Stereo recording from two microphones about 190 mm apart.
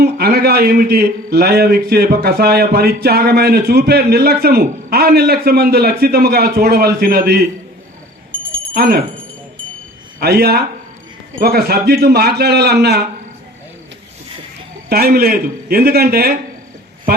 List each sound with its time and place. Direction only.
0.0 s a man's voice: 55° right (ahead or behind)
8.7 s speech: 55° right (ahead or behind)
10.2 s a man's voice: 55° right (ahead or behind)
14.8 s a man's voice: 55° right (ahead or behind)